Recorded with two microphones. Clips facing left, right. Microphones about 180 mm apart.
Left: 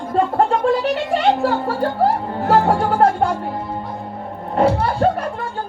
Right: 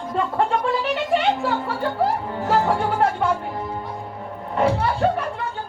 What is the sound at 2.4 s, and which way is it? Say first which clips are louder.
Music: left 5 dB; 60° left (ahead or behind).